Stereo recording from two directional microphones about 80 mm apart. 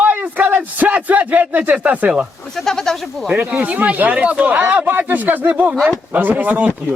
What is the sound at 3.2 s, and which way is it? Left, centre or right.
Speech, centre.